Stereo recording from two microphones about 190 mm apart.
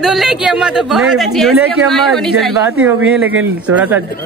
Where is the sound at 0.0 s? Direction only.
Centre (ahead or behind).